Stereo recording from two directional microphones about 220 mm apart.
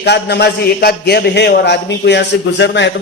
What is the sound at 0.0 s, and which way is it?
A man's voice, 50° left (ahead or behind).